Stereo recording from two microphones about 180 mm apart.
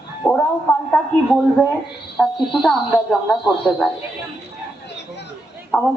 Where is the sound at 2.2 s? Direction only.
5° left (ahead or behind).